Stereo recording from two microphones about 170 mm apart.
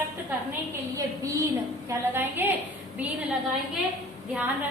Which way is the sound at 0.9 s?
20° right (ahead or behind).